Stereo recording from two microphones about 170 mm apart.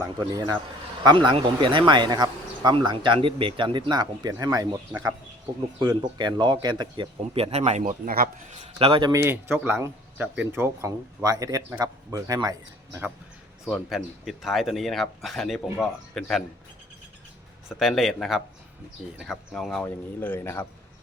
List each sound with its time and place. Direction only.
0.0 s speech: 20° right (ahead or behind)
5.8 s speech: 25° right (ahead or behind); by 8.3 s 55° right (ahead or behind)
8.5 s a man's voice: 30° right (ahead or behind)
13.7 s speech: centre (ahead or behind)
17.7 s a man's voice: centre (ahead or behind)